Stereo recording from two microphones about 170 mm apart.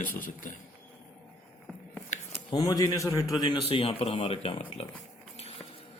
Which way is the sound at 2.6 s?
20° left (ahead or behind).